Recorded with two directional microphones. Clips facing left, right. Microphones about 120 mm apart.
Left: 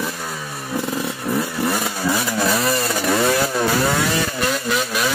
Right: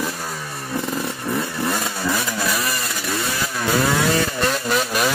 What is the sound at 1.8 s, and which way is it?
Vehicle, 15° left (ahead or behind).